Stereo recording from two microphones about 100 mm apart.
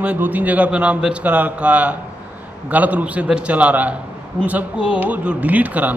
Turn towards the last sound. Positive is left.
turn(degrees=-15)  # may be behind; listen again after turning